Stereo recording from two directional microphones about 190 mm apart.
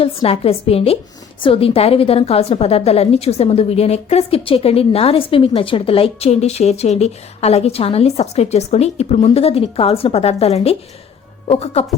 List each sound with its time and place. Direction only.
0.0 s a woman's voice: 30° left (ahead or behind)